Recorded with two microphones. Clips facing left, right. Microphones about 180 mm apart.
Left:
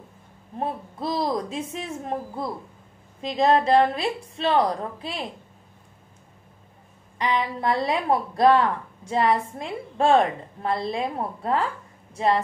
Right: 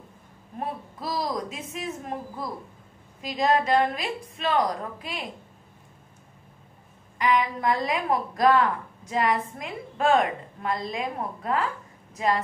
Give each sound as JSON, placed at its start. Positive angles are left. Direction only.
{"t": 0.6, "sound": "a woman's voice", "side_deg": 30}
{"t": 7.2, "sound": "a woman's voice", "side_deg": 30}